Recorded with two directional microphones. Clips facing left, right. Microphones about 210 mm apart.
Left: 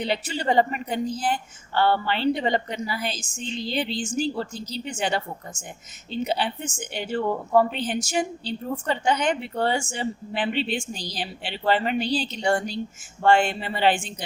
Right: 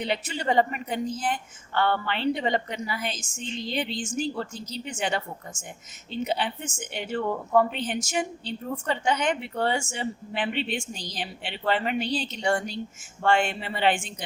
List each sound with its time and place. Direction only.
0.0 s speech: 30° left (ahead or behind)